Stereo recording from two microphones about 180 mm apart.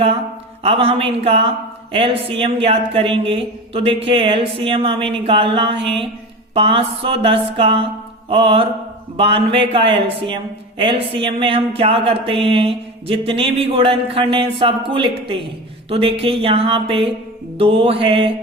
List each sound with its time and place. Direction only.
0.6 s speech: 35° right (ahead or behind)